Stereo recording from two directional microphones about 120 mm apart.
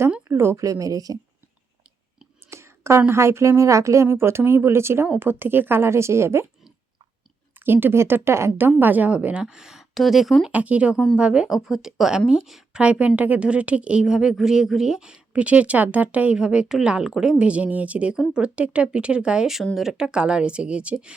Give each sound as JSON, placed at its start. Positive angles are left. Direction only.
{"t": 0.3, "sound": "speech", "side_deg": -20}
{"t": 2.5, "sound": "a sound", "side_deg": -20}
{"t": 3.1, "sound": "speech", "side_deg": -20}
{"t": 7.6, "sound": "a woman's voice", "side_deg": -15}